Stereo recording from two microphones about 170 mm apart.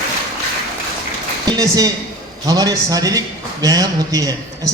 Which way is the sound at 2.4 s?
20° right (ahead or behind).